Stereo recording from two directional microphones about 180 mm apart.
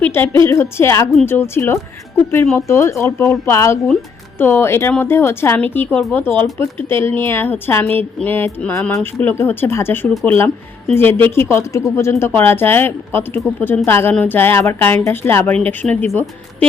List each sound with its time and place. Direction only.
0.0 s a woman's voice: 10° left (ahead or behind)
8.8 s a woman's voice: 5° left (ahead or behind)